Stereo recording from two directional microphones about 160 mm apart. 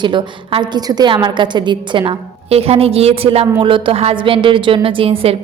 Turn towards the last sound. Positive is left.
turn(degrees=-35)  # may be behind; listen again after turning